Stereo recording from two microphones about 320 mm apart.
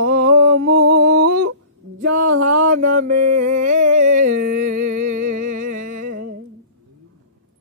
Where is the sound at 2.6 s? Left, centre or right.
Right.